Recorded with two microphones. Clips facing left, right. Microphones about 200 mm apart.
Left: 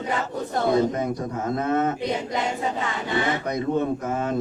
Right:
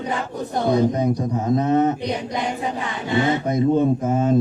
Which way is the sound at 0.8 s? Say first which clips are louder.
Right 4 dB; 15° right (ahead or behind).